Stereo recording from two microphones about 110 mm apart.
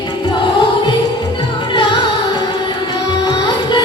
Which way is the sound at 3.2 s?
40° left (ahead or behind).